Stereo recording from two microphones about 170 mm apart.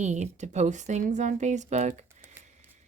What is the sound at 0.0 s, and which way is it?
Speech, 45° right (ahead or behind).